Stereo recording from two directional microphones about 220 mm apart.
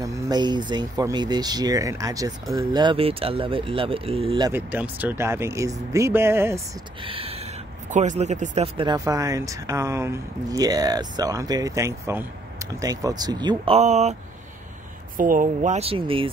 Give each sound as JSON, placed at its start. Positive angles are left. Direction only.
{"t": 0.0, "sound": "speech", "side_deg": -15}
{"t": 4.5, "sound": "speech", "side_deg": -10}
{"t": 7.0, "sound": "speech", "side_deg": -25}
{"t": 13.7, "sound": "speech", "side_deg": -30}
{"t": 15.1, "sound": "speech", "side_deg": -40}